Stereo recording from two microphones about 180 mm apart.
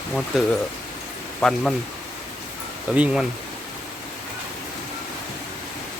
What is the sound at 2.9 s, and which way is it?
Speech, 5° right (ahead or behind).